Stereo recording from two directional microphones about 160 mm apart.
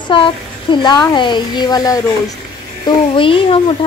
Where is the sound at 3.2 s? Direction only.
35° left (ahead or behind).